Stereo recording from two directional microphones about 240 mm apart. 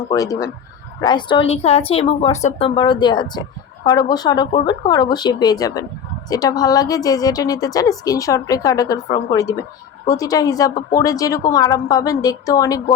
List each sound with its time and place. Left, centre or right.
0.1 s a woman's voice: centre